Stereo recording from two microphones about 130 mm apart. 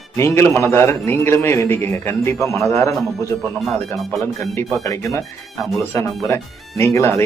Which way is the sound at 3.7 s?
Centre (ahead or behind).